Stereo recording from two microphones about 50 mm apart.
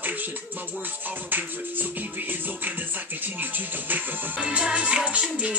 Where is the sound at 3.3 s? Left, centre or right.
Right.